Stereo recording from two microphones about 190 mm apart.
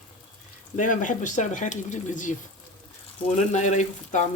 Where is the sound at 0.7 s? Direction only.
45° left (ahead or behind).